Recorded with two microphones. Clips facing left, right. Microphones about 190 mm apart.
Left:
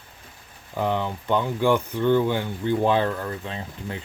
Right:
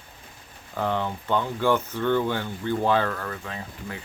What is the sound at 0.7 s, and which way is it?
Speech, 15° left (ahead or behind).